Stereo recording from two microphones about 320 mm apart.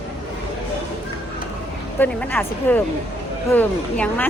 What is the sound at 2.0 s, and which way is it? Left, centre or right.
Speech, centre.